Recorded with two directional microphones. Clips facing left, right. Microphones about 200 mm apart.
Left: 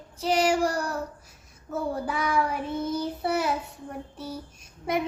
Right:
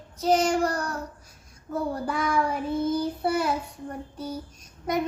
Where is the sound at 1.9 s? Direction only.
5° left (ahead or behind).